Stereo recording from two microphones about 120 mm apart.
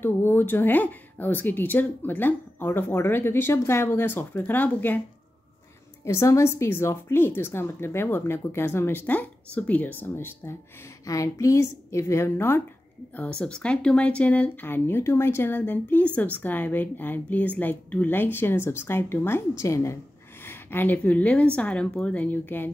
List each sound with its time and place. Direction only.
0.0 s speech: 20° left (ahead or behind)
6.0 s a woman's voice: 25° left (ahead or behind)